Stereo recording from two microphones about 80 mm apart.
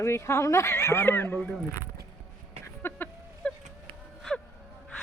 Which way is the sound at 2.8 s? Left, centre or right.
Left.